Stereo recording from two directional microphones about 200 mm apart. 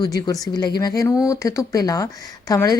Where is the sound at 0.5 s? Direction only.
20° left (ahead or behind).